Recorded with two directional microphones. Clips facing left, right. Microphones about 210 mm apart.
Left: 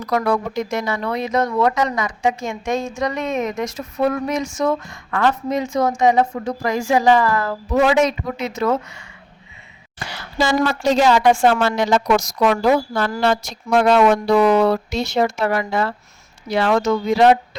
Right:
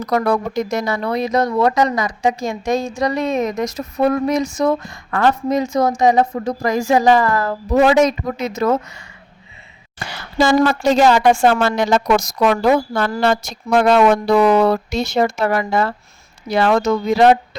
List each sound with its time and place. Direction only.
0.0 s speech: 40° right (ahead or behind)
10.3 s speech: 50° right (ahead or behind)